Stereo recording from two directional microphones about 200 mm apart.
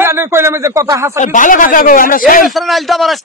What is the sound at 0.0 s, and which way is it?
Speech, 15° right (ahead or behind).